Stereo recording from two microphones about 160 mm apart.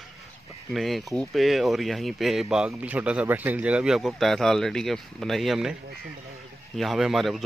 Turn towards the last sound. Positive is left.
turn(degrees=0)  # may be behind; listen again after turning